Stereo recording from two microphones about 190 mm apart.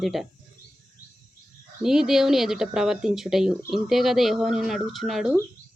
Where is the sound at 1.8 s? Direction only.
Centre (ahead or behind).